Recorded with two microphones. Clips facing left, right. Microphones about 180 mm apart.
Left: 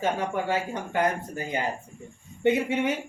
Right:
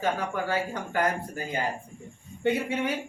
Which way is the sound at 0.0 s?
25° left (ahead or behind).